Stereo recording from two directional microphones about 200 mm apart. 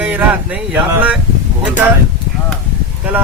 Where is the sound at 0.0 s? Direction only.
10° right (ahead or behind).